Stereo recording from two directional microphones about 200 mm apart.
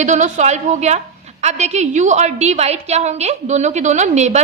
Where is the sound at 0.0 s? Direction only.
35° right (ahead or behind).